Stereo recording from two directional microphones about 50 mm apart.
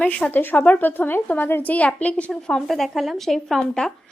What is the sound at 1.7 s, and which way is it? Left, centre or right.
Speech, left.